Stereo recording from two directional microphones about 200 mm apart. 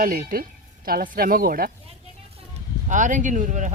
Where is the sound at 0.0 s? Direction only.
45° right (ahead or behind).